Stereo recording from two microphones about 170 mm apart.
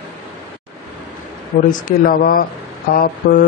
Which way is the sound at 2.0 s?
55° left (ahead or behind).